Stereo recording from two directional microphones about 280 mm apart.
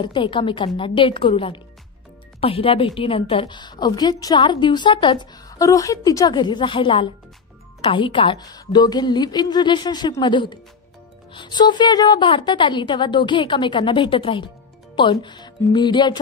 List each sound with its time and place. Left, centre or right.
0.0 s a woman's voice: centre